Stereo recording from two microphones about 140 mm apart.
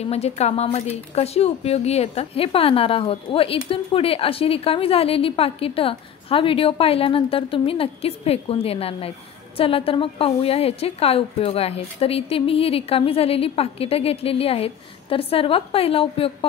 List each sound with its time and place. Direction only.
0.0 s a woman's voice: 50° left (ahead or behind)